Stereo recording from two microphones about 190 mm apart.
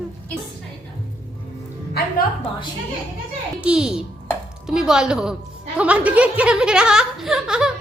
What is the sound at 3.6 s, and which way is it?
A woman's voice, 5° right (ahead or behind).